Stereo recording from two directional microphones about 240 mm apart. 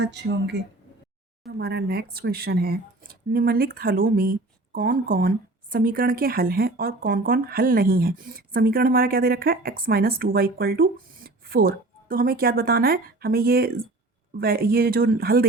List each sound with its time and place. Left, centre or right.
0.0 s speech: right